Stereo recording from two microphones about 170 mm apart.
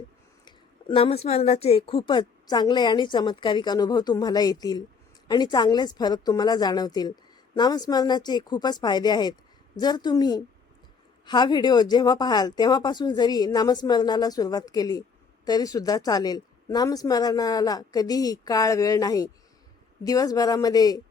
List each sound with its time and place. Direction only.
0.4 s a woman's voice: 25° left (ahead or behind)